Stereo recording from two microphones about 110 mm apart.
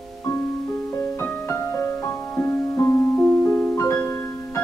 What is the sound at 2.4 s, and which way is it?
Piano, 20° left (ahead or behind).